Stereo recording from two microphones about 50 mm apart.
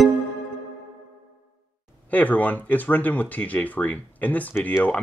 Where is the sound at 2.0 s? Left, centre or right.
Left.